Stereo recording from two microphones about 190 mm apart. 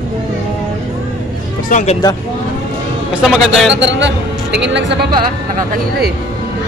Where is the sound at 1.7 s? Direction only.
40° left (ahead or behind).